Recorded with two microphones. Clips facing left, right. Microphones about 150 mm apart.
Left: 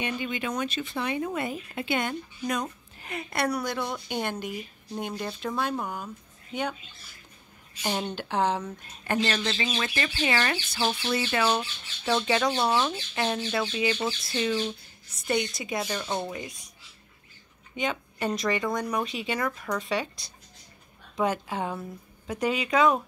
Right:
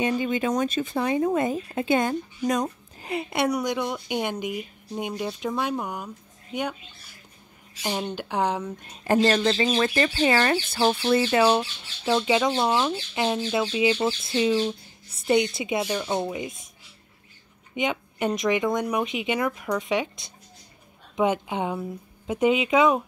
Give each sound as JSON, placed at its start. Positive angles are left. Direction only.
{"t": 0.0, "sound": "speech", "side_deg": -40}
{"t": 7.8, "sound": "a woman's voice", "side_deg": 0}
{"t": 9.0, "sound": "speech", "side_deg": -35}
{"t": 11.3, "sound": "speech", "side_deg": -30}
{"t": 12.1, "sound": "speech", "side_deg": -15}
{"t": 15.9, "sound": "speech", "side_deg": -10}
{"t": 17.7, "sound": "speech", "side_deg": -20}